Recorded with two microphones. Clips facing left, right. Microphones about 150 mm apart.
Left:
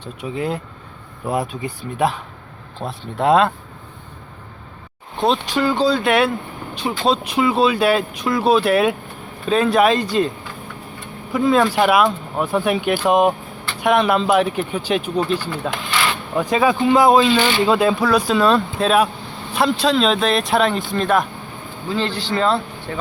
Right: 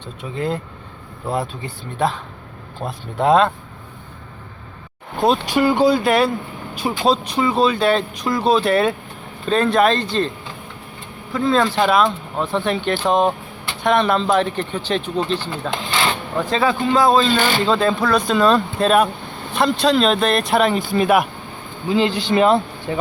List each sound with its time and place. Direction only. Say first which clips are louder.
0.2 s speech: even; 5° left (ahead or behind)
2.8 s speech: even; centre (ahead or behind)
5.2 s speech: right 2 dB; 5° right (ahead or behind)
6.0 s speech: even; centre (ahead or behind)
7.3 s speech: left 1 dB; 5° left (ahead or behind)
15.7 s speech: right 3 dB; 25° right (ahead or behind)
16.4 s speech: left 2 dB; 10° left (ahead or behind)
17.3 s speech: left 1 dB; 45° right (ahead or behind)
17.7 s speech: left 1 dB; 10° left (ahead or behind); by 23.0 s 15° right (ahead or behind)